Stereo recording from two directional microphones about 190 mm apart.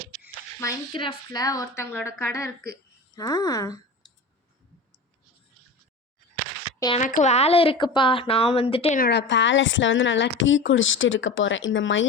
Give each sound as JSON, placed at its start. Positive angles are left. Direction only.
{"t": 0.6, "sound": "a woman's voice", "side_deg": 20}
{"t": 6.9, "sound": "a woman's voice", "side_deg": 40}
{"t": 9.0, "sound": "speech", "side_deg": 60}